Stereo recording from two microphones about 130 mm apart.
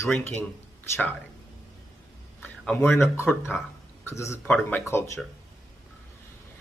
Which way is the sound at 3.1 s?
20° left (ahead or behind).